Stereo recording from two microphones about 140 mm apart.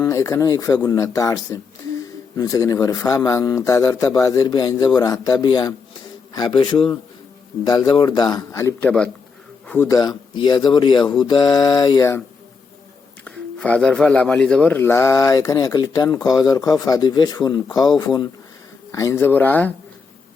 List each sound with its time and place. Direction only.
0.0 s speech: 20° left (ahead or behind)
8.8 s speech: 5° left (ahead or behind)
10.0 s speech: 30° left (ahead or behind)
13.2 s speech: 10° left (ahead or behind)